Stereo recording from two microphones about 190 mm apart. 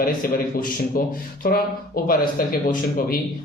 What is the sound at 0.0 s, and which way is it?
Speech, 50° left (ahead or behind).